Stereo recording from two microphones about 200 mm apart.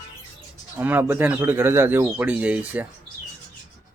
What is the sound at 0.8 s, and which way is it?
Speech, 10° right (ahead or behind).